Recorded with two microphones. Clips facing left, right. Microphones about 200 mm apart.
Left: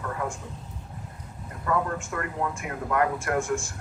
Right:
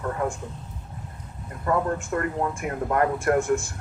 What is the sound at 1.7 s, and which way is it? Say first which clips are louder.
Speech: right 3 dB; 35° right (ahead or behind).